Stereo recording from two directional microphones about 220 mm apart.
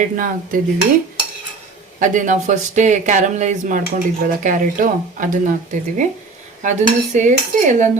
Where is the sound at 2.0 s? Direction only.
35° right (ahead or behind).